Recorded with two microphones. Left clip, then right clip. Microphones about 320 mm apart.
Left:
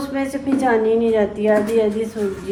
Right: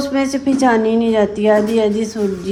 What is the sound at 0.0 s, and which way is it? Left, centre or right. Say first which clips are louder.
A woman's voice: right 5 dB; right.